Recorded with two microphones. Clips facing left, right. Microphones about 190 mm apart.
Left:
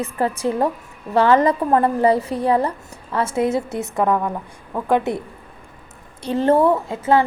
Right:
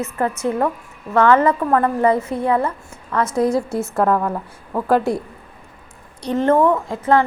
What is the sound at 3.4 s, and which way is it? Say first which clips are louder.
Speech: right 2 dB; 25° left (ahead or behind).